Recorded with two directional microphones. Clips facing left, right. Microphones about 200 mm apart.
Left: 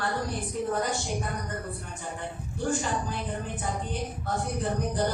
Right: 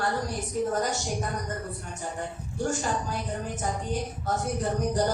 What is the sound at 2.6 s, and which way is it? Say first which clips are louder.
Speech: even; 45° right (ahead or behind).